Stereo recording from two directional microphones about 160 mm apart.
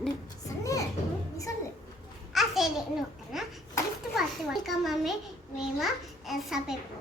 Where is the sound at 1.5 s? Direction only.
20° left (ahead or behind).